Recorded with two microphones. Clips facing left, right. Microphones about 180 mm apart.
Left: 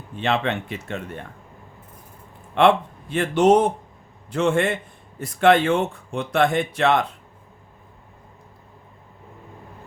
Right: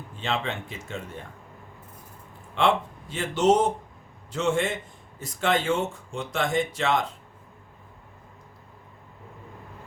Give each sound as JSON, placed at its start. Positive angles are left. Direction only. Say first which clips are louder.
{"t": 0.2, "sound": "speech", "louder": "left 6 dB", "side_deg": 65}
{"t": 2.6, "sound": "speech", "louder": "left 6 dB", "side_deg": 60}